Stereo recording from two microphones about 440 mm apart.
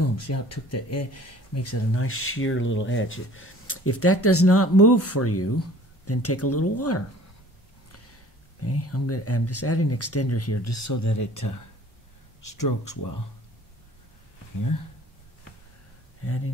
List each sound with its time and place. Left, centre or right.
0.0 s speech: left
8.6 s speech: left
16.2 s speech: left